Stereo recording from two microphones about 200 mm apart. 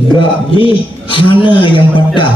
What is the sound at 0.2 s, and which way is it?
A man's voice, 25° left (ahead or behind).